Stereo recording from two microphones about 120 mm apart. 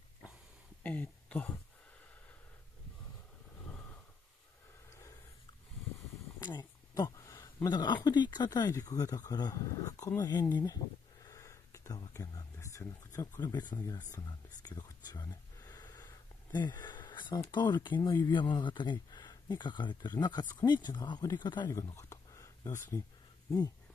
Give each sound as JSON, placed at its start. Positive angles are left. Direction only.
{"t": 0.8, "sound": "speech", "side_deg": 15}
{"t": 4.9, "sound": "snort", "side_deg": 25}
{"t": 6.4, "sound": "speech", "side_deg": 40}
{"t": 6.9, "sound": "a sound", "side_deg": 30}
{"t": 7.5, "sound": "speech", "side_deg": 35}
{"t": 13.4, "sound": "speech", "side_deg": 35}
{"t": 14.1, "sound": "whispering", "side_deg": 35}
{"t": 16.8, "sound": "speech", "side_deg": 40}
{"t": 21.8, "sound": "speech", "side_deg": 25}